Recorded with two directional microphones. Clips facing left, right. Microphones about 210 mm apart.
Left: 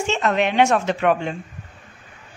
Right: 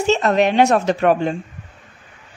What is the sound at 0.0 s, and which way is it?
A woman's voice, 40° right (ahead or behind).